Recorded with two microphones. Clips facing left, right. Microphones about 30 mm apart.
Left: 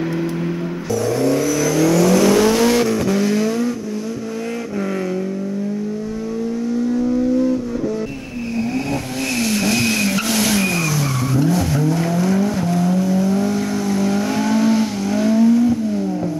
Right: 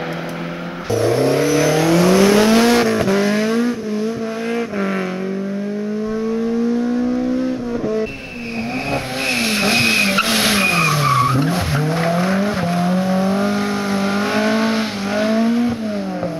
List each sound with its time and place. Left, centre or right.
0.9 s vehicle: right
9.4 s vehicle: right